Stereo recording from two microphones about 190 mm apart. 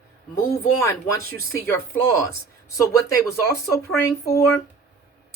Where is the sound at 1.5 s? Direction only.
15° left (ahead or behind).